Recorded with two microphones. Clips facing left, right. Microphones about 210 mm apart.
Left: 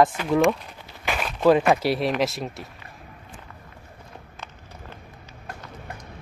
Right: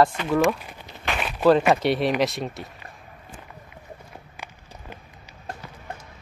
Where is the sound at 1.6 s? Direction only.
Centre (ahead or behind).